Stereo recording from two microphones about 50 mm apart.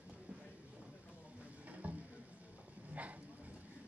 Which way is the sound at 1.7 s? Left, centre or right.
Right.